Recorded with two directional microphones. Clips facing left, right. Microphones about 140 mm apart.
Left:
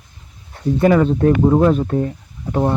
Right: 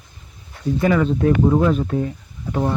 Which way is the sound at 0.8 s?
40° left (ahead or behind).